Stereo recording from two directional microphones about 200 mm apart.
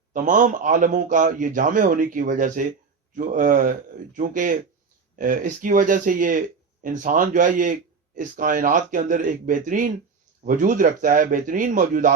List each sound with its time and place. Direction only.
0.1 s a man's voice: 40° right (ahead or behind)